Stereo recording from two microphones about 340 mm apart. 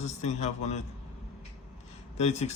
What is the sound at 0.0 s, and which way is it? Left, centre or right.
Speech, centre.